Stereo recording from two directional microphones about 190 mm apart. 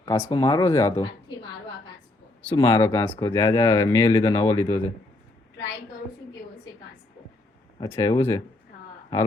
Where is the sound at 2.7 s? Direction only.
15° left (ahead or behind).